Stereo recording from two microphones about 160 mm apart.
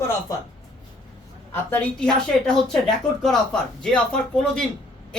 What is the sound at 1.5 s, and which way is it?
Speech, 10° left (ahead or behind).